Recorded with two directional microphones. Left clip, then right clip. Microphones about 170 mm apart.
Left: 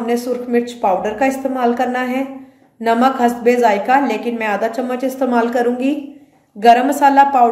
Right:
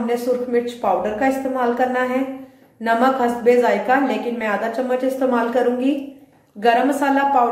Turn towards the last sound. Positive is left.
turn(degrees=65)  # may be behind; listen again after turning